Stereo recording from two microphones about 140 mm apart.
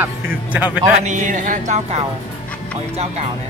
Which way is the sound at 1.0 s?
60° right (ahead or behind).